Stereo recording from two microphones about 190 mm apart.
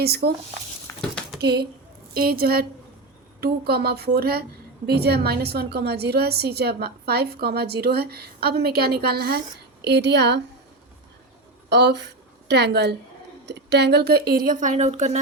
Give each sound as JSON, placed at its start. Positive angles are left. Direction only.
{"t": 0.0, "sound": "a woman's voice", "side_deg": -55}
{"t": 0.9, "sound": "a sound", "side_deg": 5}
{"t": 1.4, "sound": "a woman's voice", "side_deg": -55}
{"t": 11.7, "sound": "speech", "side_deg": -60}